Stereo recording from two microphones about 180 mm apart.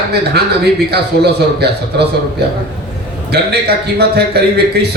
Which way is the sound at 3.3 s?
65° right (ahead or behind).